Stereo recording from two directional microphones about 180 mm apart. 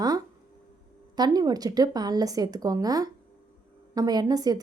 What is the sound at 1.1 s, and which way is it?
A woman's voice, 20° right (ahead or behind).